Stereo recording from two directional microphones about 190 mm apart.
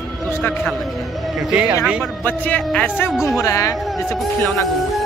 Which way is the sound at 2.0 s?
10° left (ahead or behind).